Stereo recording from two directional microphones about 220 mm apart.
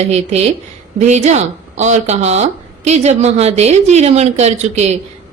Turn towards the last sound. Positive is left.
turn(degrees=-30)  # may be behind; listen again after turning